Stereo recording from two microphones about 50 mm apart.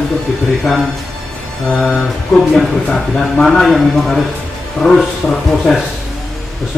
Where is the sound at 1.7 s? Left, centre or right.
Centre.